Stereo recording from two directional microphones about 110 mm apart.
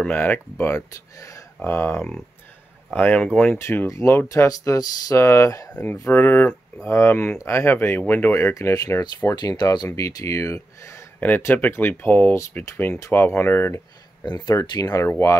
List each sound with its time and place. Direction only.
0.0 s speech: 15° left (ahead or behind)
1.6 s speech: 20° left (ahead or behind)
2.0 s speech: 5° left (ahead or behind); by 11.1 s 25° left (ahead or behind)
11.1 s speech: 15° left (ahead or behind)
14.2 s speech: 40° left (ahead or behind)
15.0 s speech: 25° left (ahead or behind)